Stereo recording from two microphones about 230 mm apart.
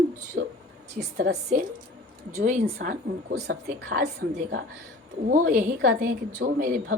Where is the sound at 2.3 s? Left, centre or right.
Right.